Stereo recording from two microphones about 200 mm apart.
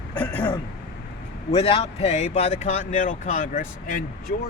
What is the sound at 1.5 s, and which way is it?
Speech, 30° left (ahead or behind).